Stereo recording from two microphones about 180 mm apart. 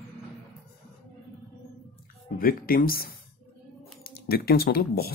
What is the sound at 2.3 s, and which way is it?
Speech, 55° left (ahead or behind).